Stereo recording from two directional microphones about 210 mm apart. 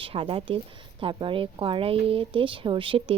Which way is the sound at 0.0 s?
25° right (ahead or behind).